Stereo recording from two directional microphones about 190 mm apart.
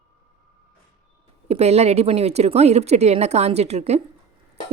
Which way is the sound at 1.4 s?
35° right (ahead or behind).